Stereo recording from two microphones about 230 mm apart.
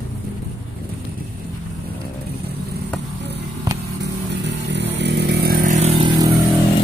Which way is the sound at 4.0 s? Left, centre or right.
Right.